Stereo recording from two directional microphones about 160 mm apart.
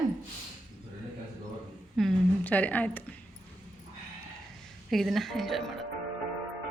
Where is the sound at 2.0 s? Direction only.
5° left (ahead or behind).